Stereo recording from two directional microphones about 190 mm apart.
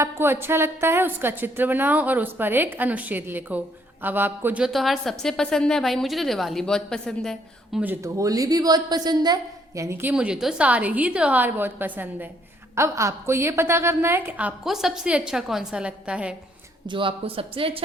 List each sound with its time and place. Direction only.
0.0 s a woman's voice: 10° right (ahead or behind)
16.8 s speech: 25° right (ahead or behind)